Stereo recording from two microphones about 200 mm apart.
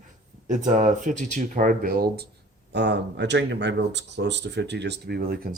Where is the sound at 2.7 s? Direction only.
60° right (ahead or behind).